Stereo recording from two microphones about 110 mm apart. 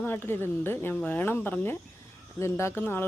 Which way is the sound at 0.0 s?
20° left (ahead or behind).